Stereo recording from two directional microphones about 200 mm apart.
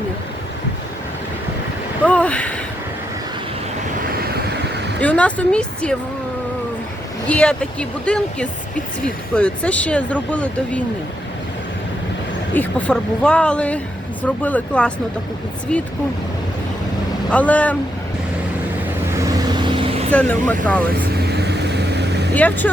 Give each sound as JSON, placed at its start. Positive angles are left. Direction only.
{"t": 2.0, "sound": "a sound", "side_deg": 5}
{"t": 4.2, "sound": "vehicle", "side_deg": -50}
{"t": 4.9, "sound": "a woman's voice", "side_deg": 5}
{"t": 7.3, "sound": "a woman's voice", "side_deg": 5}
{"t": 12.5, "sound": "a woman's voice", "side_deg": 5}
{"t": 17.3, "sound": "a woman's voice", "side_deg": 5}
{"t": 19.1, "sound": "vehicle", "side_deg": -20}
{"t": 20.1, "sound": "a woman's voice", "side_deg": 5}
{"t": 21.2, "sound": "vehicle", "side_deg": -55}
{"t": 22.4, "sound": "a woman's voice", "side_deg": 10}